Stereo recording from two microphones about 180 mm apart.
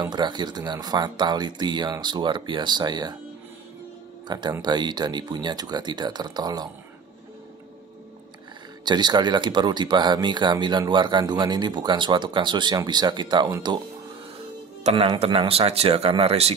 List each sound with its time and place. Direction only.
0.0 s speech: 25° right (ahead or behind)
4.3 s speech: 25° right (ahead or behind)
8.8 s speech: 25° right (ahead or behind)
14.8 s speech: 35° right (ahead or behind)